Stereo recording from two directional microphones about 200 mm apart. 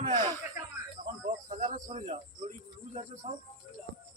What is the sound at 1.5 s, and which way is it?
Speech, 40° right (ahead or behind).